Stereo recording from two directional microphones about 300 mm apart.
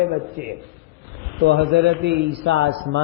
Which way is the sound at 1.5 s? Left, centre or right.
Right.